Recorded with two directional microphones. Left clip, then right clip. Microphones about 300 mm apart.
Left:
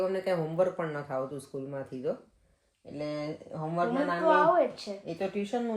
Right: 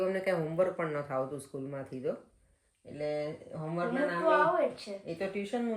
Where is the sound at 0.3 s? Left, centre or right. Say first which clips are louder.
Left 2 dB; centre.